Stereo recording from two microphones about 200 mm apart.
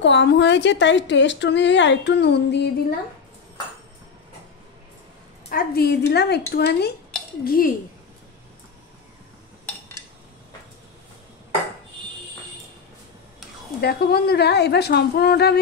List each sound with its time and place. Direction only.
0.0 s a woman's voice: 65° left (ahead or behind)
5.5 s a woman's voice: 50° left (ahead or behind)
13.7 s a woman's voice: 50° left (ahead or behind)